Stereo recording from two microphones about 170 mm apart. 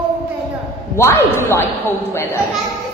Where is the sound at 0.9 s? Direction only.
15° left (ahead or behind).